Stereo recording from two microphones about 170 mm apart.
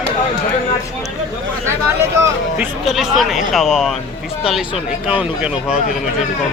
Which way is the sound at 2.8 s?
Centre (ahead or behind).